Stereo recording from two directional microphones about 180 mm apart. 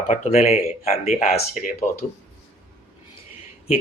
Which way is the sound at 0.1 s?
35° left (ahead or behind).